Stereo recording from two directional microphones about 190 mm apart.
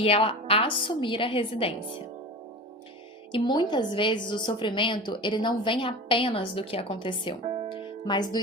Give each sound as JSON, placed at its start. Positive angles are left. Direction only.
{"t": 0.0, "sound": "a woman's voice", "side_deg": 30}
{"t": 3.3, "sound": "a woman's voice", "side_deg": 25}
{"t": 7.4, "sound": "music", "side_deg": -30}
{"t": 7.7, "sound": "music", "side_deg": 25}